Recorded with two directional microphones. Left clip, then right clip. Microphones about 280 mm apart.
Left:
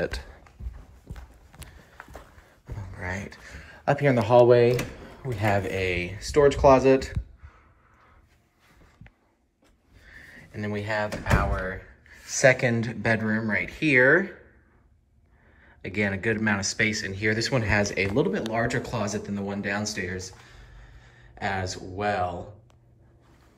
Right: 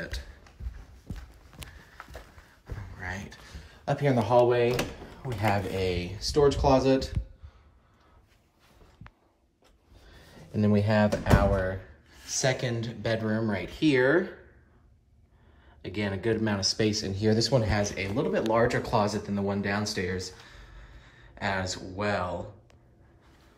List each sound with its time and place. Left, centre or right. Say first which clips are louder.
0.0 s a sound: left 9 dB; centre
2.6 s a sound: left 3 dB; centre
3.3 s speech: left 5 dB; centre
10.5 s speech: right 3 dB; right
12.3 s speech: left 8 dB; centre
15.6 s speech: left 6 dB; centre